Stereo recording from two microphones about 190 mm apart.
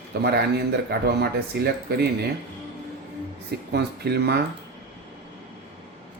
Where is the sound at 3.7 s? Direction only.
60° right (ahead or behind).